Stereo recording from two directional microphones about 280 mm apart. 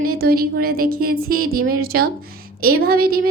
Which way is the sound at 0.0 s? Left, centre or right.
Right.